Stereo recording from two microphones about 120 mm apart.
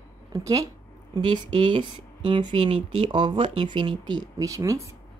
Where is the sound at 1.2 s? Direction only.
40° right (ahead or behind); by 3.1 s 55° right (ahead or behind).